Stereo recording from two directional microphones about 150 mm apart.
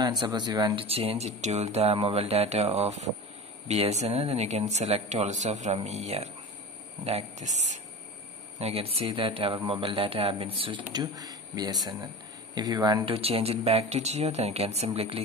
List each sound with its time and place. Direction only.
0.0 s speech: 30° right (ahead or behind)
0.8 s speech: 40° right (ahead or behind)
13.1 s speech: 40° right (ahead or behind)